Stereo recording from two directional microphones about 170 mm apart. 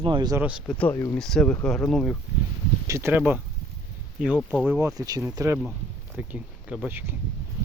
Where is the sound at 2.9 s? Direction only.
15° right (ahead or behind).